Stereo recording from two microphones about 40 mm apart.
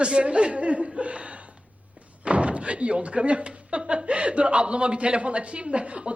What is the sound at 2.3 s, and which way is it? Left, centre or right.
A woman's voice, right.